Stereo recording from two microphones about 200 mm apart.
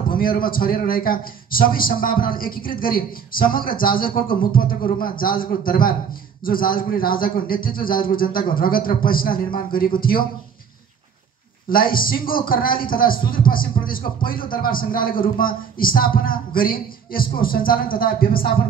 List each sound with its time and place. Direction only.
0.1 s a man's voice: 45° left (ahead or behind)
11.7 s a man's voice: 45° left (ahead or behind)